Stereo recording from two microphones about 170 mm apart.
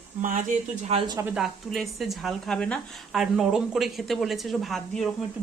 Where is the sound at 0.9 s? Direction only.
35° right (ahead or behind).